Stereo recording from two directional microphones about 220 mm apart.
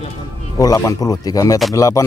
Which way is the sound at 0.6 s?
15° left (ahead or behind).